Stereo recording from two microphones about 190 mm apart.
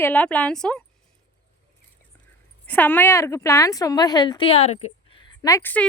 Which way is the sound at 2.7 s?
10° left (ahead or behind).